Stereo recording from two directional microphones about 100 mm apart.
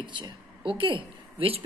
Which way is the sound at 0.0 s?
50° right (ahead or behind).